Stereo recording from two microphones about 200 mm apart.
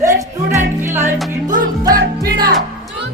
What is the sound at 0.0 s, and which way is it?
Music, 15° right (ahead or behind).